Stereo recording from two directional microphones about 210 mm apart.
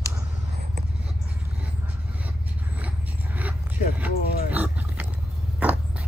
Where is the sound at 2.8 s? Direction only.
10° right (ahead or behind).